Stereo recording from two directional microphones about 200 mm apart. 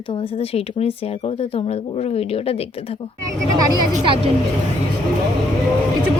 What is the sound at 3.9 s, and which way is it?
Speech, 25° right (ahead or behind).